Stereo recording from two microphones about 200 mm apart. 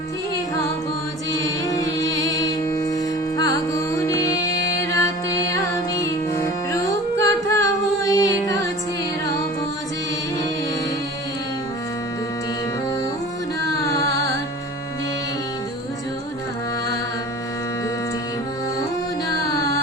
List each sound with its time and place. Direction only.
1.3 s music: 15° left (ahead or behind)
5.9 s carnatic music: 15° left (ahead or behind)